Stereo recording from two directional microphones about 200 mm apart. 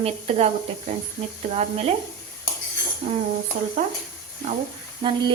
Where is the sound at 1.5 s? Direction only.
35° right (ahead or behind).